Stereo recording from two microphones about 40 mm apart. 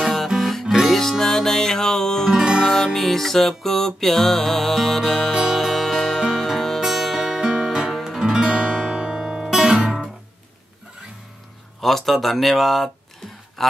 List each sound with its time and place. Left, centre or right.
0.4 s music: centre
0.7 s music: centre
0.9 s music: centre
2.3 s music: centre
2.7 s music: centre
8.2 s guitar: centre
8.7 s music: centre
11.8 s a man's voice: centre